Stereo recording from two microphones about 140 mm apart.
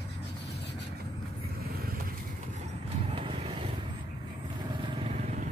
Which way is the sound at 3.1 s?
40° right (ahead or behind).